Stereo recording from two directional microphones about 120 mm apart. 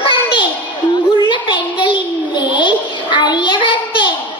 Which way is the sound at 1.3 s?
40° left (ahead or behind).